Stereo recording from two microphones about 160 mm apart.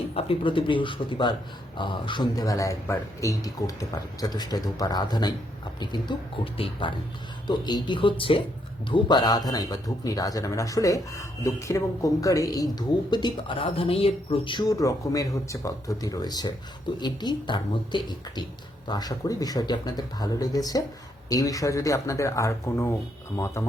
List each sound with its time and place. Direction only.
0.1 s speech: 35° left (ahead or behind); by 22.9 s 15° left (ahead or behind)